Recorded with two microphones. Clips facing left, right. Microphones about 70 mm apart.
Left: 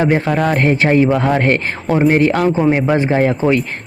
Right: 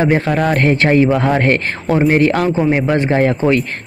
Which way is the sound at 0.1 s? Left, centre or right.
Centre.